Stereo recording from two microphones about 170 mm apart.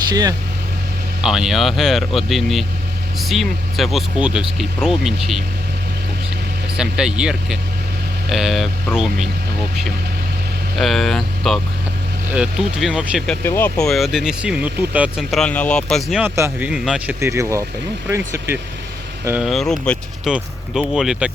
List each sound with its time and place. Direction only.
0.1 s speech: 20° right (ahead or behind)
1.2 s speech: 5° right (ahead or behind)
6.7 s speech: 5° right (ahead or behind)
10.8 s speech: centre (ahead or behind)
13.4 s speech: 10° left (ahead or behind)
16.2 s speech: 15° right (ahead or behind)
17.2 s speech: 15° right (ahead or behind)
19.5 s speech: centre (ahead or behind)